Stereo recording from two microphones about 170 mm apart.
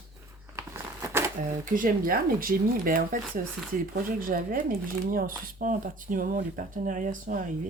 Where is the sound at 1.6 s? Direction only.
55° right (ahead or behind).